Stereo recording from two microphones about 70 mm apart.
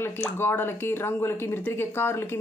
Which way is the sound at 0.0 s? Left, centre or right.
Left.